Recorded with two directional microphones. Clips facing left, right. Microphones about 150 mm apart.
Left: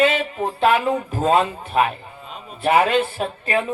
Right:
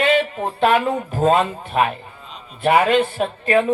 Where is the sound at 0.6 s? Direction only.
45° right (ahead or behind).